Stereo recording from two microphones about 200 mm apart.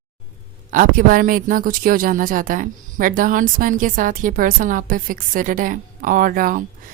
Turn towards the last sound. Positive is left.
turn(degrees=-45)  # may be behind; listen again after turning